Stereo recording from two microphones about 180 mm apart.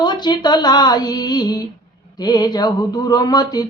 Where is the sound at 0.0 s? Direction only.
25° left (ahead or behind).